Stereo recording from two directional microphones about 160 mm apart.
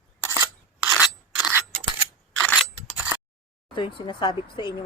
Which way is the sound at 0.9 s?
10° right (ahead or behind).